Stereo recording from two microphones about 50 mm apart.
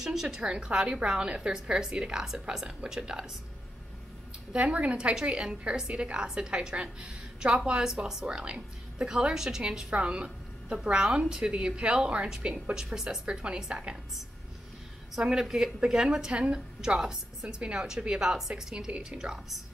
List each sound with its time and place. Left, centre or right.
0.0 s a woman's voice: centre
4.5 s a woman's voice: right
7.8 s a woman's voice: centre
12.7 s a woman's voice: centre
15.2 s a woman's voice: centre